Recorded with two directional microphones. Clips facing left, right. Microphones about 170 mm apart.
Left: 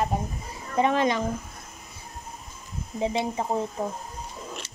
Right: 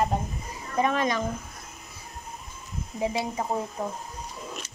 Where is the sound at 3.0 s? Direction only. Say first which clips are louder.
Left 2 dB; 25° left (ahead or behind).